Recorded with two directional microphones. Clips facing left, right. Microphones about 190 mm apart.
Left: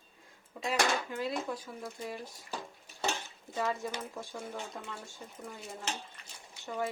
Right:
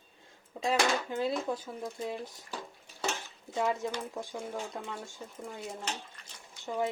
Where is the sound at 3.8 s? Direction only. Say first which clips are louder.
Right 3 dB; 15° right (ahead or behind).